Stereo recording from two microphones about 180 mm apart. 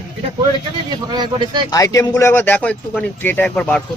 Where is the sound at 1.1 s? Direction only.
25° right (ahead or behind).